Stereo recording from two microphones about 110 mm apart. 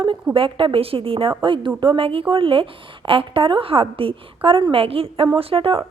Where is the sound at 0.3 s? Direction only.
55° right (ahead or behind).